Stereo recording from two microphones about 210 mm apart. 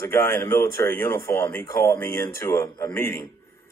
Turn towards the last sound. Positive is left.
turn(degrees=10)  # may be behind; listen again after turning